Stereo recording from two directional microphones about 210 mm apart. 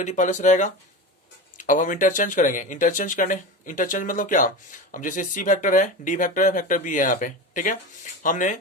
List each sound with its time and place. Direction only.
0.0 s speech: 35° left (ahead or behind)